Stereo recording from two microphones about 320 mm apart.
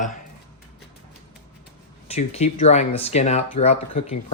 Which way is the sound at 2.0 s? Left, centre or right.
Centre.